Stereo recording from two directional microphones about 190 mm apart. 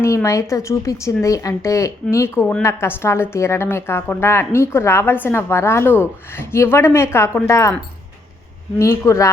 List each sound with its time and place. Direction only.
0.0 s a woman's voice: 15° left (ahead or behind)
8.8 s a woman's voice: 15° left (ahead or behind)